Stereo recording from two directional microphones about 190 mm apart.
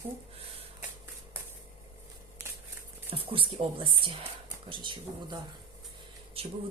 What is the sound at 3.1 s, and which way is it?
Speech, 30° right (ahead or behind).